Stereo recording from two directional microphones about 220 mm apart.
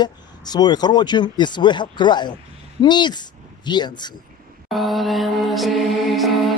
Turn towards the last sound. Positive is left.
turn(degrees=0)  # may be behind; listen again after turning